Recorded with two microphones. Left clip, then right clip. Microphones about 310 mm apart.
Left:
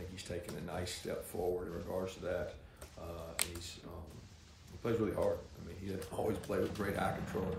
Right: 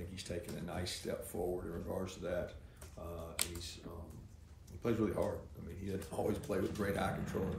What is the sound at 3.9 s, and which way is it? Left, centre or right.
Speech, centre.